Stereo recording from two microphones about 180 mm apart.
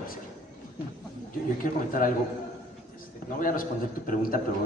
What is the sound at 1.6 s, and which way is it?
Speech, 50° left (ahead or behind).